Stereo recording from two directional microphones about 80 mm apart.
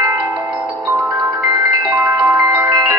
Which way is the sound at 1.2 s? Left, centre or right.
Right.